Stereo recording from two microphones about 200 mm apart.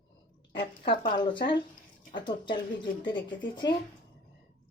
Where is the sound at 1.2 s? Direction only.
25° left (ahead or behind).